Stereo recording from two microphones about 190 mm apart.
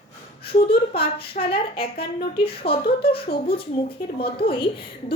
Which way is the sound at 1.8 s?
30° left (ahead or behind).